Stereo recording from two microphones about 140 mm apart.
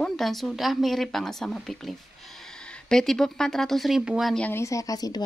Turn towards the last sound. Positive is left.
turn(degrees=25)  # may be behind; listen again after turning